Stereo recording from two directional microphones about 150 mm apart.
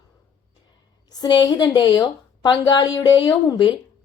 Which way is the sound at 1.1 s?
25° left (ahead or behind).